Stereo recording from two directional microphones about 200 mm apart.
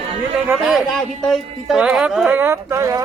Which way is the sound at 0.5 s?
Centre (ahead or behind).